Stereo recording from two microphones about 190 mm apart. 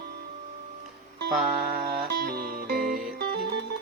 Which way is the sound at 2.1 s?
55° right (ahead or behind).